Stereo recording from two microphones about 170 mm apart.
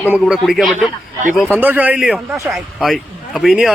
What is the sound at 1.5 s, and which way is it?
Speech, 10° right (ahead or behind).